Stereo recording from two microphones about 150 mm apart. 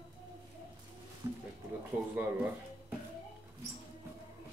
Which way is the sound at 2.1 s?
10° right (ahead or behind).